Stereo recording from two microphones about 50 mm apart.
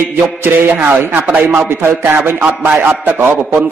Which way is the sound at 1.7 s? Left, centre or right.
Right.